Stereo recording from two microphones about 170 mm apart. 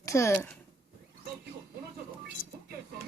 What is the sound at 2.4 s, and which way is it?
Music, 55° left (ahead or behind).